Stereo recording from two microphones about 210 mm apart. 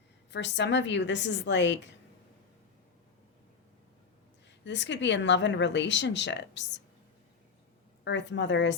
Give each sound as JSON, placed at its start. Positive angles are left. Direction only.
{"t": 0.3, "sound": "speech", "side_deg": 55}
{"t": 4.6, "sound": "speech", "side_deg": 60}
{"t": 8.0, "sound": "speech", "side_deg": 60}